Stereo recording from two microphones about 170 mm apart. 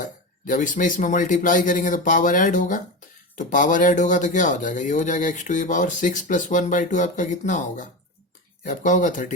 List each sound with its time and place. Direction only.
0.0 s speech: 50° left (ahead or behind)